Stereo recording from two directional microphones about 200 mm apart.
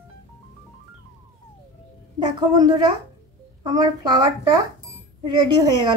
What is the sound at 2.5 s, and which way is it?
A woman's voice, 20° right (ahead or behind).